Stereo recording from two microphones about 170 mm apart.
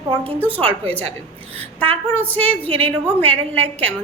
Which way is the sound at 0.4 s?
10° left (ahead or behind).